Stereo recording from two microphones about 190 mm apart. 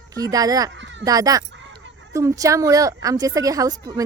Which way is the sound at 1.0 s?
20° right (ahead or behind).